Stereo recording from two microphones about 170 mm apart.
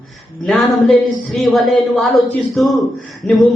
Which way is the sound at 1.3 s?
Centre (ahead or behind).